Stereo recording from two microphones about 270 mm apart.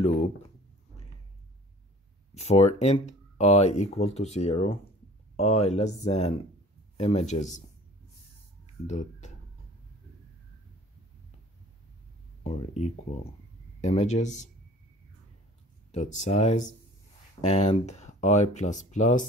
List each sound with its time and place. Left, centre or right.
2.3 s speech: left
8.8 s speech: left
12.4 s speech: left
15.9 s speech: left